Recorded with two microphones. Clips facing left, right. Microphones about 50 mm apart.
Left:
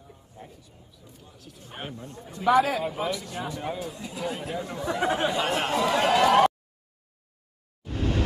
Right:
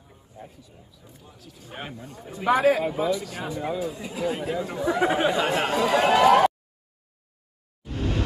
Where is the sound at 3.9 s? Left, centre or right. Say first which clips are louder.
Right 4 dB; centre.